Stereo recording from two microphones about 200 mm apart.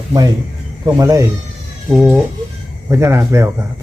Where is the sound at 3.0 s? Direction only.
15° right (ahead or behind).